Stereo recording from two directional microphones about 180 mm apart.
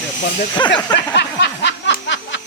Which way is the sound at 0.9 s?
75° left (ahead or behind).